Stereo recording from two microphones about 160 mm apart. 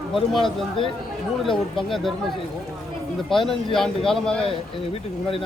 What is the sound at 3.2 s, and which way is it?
Speech, centre (ahead or behind).